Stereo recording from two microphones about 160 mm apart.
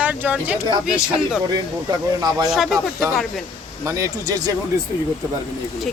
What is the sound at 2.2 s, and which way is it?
Speech, 25° right (ahead or behind).